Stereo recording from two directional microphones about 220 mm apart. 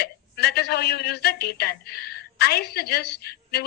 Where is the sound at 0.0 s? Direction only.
45° left (ahead or behind).